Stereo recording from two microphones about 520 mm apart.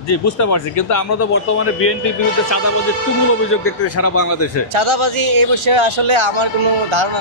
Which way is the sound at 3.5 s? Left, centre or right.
Left.